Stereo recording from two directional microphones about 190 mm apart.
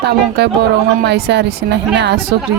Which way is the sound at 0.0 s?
60° right (ahead or behind).